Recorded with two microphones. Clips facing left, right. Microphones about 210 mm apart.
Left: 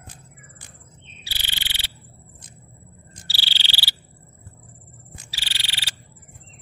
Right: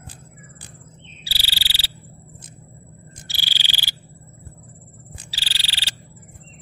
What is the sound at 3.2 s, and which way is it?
Frog, 15° right (ahead or behind).